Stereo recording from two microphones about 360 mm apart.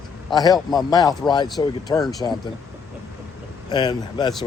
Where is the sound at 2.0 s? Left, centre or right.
Centre.